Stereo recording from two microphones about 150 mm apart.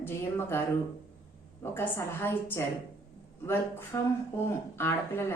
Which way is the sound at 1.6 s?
15° left (ahead or behind).